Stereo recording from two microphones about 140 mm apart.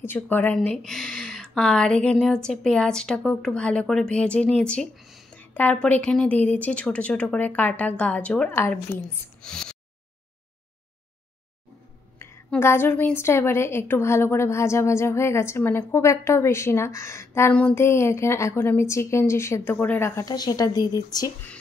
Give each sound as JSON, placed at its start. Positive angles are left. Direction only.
{"t": 0.0, "sound": "speech", "side_deg": 15}
{"t": 0.6, "sound": "speech", "side_deg": 0}
{"t": 5.4, "sound": "a woman's voice", "side_deg": 10}
{"t": 9.4, "sound": "a sound", "side_deg": 5}
{"t": 12.4, "sound": "a woman's voice", "side_deg": 15}